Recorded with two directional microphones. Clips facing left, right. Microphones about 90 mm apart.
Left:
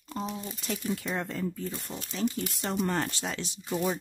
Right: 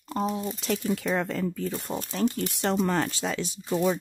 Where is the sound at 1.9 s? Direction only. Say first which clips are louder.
Right 6 dB; 40° right (ahead or behind).